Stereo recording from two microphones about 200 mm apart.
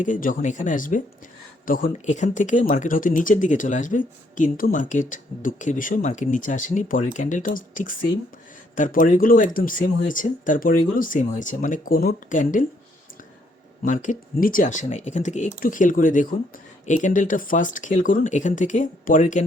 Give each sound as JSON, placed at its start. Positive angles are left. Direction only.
{"t": 0.0, "sound": "speech", "side_deg": 40}
{"t": 13.8, "sound": "speech", "side_deg": 40}